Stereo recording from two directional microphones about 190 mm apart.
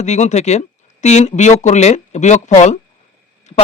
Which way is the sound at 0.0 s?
35° left (ahead or behind).